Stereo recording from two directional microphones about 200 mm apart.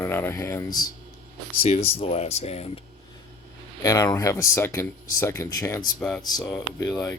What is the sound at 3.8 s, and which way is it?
Speech, 15° left (ahead or behind).